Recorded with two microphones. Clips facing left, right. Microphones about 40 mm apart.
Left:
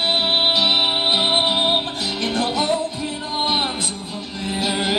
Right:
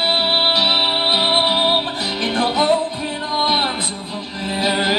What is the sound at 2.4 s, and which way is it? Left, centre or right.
Music, right.